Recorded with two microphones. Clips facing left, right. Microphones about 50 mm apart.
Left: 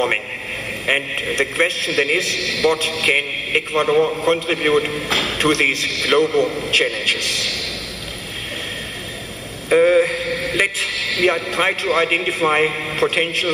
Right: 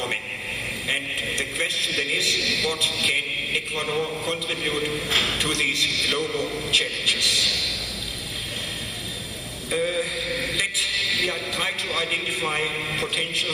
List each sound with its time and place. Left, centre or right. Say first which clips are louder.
0.8 s a man's voice: left 8 dB; left
9.7 s a man's voice: left 12 dB; left